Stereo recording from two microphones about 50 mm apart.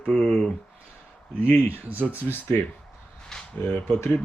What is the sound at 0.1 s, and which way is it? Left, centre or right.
Speech, centre.